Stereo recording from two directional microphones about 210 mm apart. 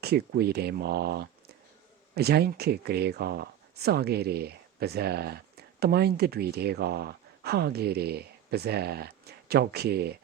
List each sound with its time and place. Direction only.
0.0 s speech: 50° right (ahead or behind)